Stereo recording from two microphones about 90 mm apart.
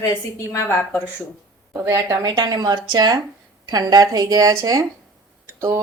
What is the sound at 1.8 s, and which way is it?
Speech, 25° right (ahead or behind).